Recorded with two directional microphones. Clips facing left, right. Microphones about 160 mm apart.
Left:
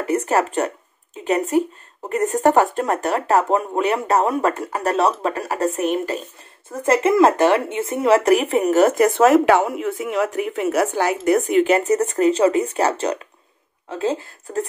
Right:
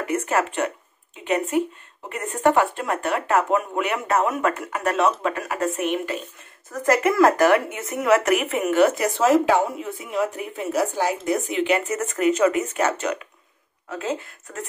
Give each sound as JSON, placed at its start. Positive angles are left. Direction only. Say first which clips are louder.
{"t": 0.0, "sound": "speech", "louder": "left 4 dB", "side_deg": 35}